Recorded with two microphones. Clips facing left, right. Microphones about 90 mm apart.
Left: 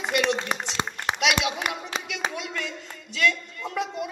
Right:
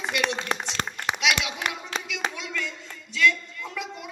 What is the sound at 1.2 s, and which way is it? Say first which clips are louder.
Clapping: left 3 dB; 35° left (ahead or behind).